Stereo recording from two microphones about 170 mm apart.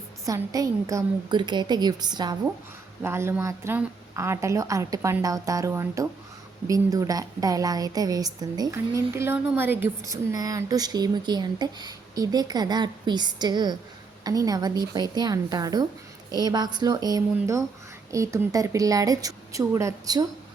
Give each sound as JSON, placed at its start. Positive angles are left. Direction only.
{"t": 0.3, "sound": "a woman's voice", "side_deg": -20}